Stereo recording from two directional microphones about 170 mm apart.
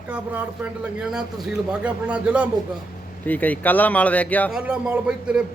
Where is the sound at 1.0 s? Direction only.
5° right (ahead or behind).